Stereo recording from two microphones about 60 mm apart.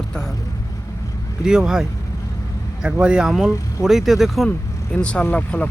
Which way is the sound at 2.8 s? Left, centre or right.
Centre.